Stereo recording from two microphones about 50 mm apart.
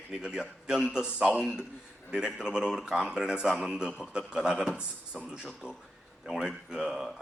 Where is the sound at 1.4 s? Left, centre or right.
Centre.